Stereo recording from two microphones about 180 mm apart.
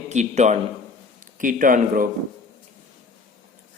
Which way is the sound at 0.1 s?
40° right (ahead or behind).